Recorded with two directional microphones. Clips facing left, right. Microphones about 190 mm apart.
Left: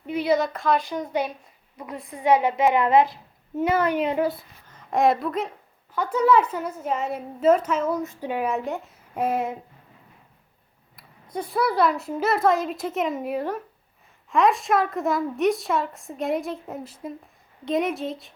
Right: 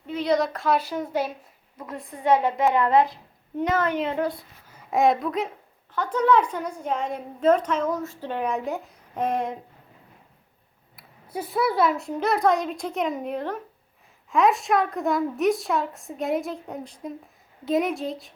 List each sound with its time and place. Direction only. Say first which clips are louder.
0.0 s a woman's voice: left 1 dB; 10° left (ahead or behind); by 1.3 s 5° right (ahead or behind)
1.8 s a woman's voice: left 1 dB; 5° left (ahead or behind)
4.6 s a woman's voice: even; 10° right (ahead or behind)
10.9 s a woman's voice: left 1 dB; 5° right (ahead or behind)